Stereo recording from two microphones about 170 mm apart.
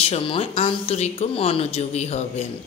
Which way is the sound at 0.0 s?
35° left (ahead or behind).